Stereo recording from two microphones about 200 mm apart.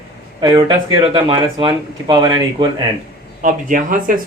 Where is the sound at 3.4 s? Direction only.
40° right (ahead or behind).